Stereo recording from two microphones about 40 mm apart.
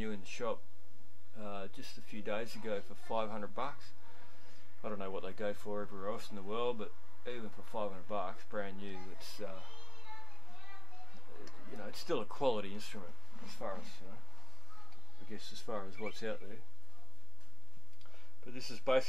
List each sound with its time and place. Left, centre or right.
0.0 s speech: centre
11.2 s speech: centre
13.8 s a sound: centre
15.2 s speech: centre
18.4 s speech: centre